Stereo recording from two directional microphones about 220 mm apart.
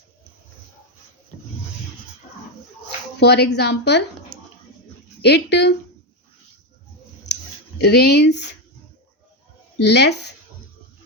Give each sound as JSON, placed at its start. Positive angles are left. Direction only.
{"t": 3.2, "sound": "speech", "side_deg": 50}
{"t": 5.2, "sound": "speech", "side_deg": 50}
{"t": 7.3, "sound": "a sound", "side_deg": 50}
{"t": 7.8, "sound": "speech", "side_deg": 50}
{"t": 9.8, "sound": "speech", "side_deg": 50}